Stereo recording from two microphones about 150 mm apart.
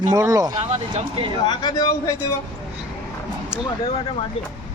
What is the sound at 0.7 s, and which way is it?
Speech, 45° right (ahead or behind).